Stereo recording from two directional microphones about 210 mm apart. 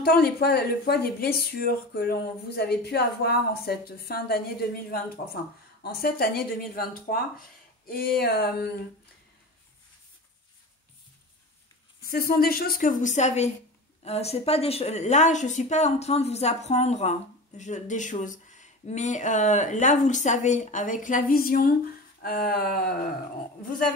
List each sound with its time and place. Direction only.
0.0 s speech: 50° left (ahead or behind)
12.0 s speech: 45° left (ahead or behind)